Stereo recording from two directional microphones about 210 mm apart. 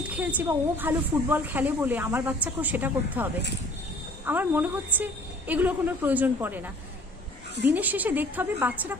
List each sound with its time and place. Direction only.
0.1 s speech: 5° right (ahead or behind)
4.3 s speech: 10° right (ahead or behind)